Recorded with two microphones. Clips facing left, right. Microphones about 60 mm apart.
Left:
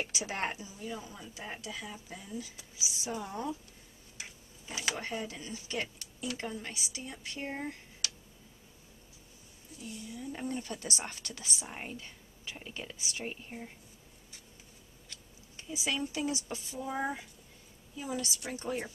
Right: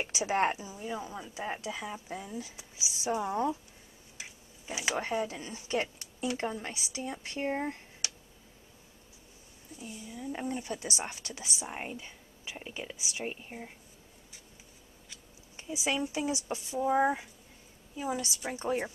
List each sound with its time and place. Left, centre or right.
0.0 s a woman's voice: right
4.6 s a woman's voice: centre
9.8 s a woman's voice: centre
10.2 s speech: centre
15.5 s a woman's voice: right